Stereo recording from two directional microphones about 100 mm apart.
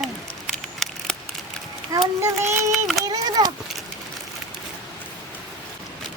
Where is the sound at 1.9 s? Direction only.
35° right (ahead or behind).